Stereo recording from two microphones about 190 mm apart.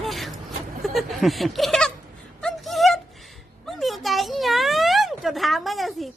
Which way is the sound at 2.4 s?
Centre (ahead or behind).